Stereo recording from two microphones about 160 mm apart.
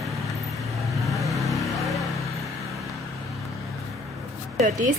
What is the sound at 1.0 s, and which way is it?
Vehicle, centre (ahead or behind).